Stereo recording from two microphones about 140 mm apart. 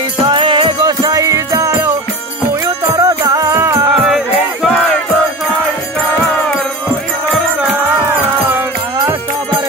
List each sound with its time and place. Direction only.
0.2 s music: 35° right (ahead or behind)
1.0 s jingle bell: 25° right (ahead or behind)
2.6 s music: 25° right (ahead or behind)
3.9 s music: 5° right (ahead or behind)
8.1 s music: 15° right (ahead or behind)